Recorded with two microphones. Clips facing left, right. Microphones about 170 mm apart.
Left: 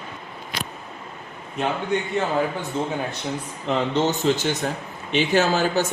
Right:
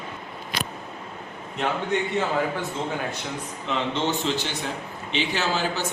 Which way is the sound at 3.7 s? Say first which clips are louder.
Left 4 dB; 40° left (ahead or behind).